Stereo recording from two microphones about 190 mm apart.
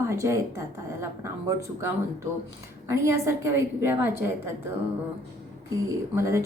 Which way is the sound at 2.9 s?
15° right (ahead or behind).